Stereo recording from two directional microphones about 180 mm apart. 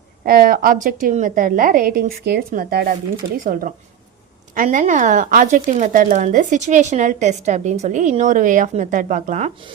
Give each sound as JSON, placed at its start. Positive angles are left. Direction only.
{"t": 0.3, "sound": "speech", "side_deg": -55}